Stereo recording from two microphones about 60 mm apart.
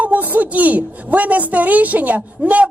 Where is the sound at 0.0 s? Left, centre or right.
Right.